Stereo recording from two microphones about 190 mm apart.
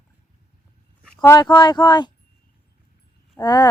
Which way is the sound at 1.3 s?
20° left (ahead or behind).